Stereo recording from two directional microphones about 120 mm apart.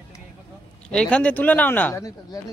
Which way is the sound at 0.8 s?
5° left (ahead or behind).